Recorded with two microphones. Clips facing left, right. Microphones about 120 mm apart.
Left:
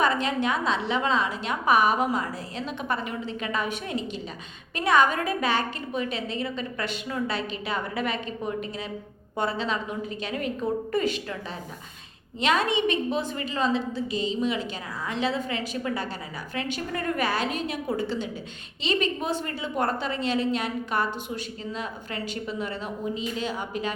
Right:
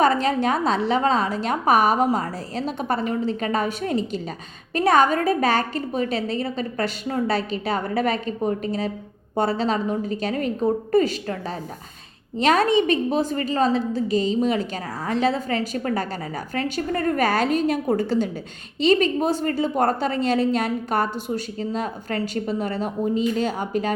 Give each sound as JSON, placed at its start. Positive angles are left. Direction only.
{"t": 0.0, "sound": "a woman's voice", "side_deg": -40}
{"t": 12.4, "sound": "a woman's voice", "side_deg": -40}